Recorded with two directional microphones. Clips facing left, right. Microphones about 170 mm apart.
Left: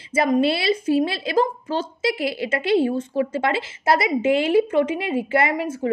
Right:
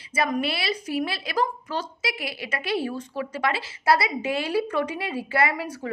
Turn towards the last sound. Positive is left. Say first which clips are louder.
# left 3 dB
turn(degrees=20)  # may be behind; listen again after turning